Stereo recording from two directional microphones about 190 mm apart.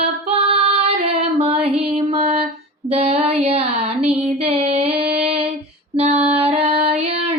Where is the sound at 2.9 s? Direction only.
35° right (ahead or behind).